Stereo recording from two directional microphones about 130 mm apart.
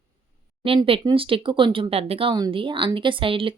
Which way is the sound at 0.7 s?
45° right (ahead or behind).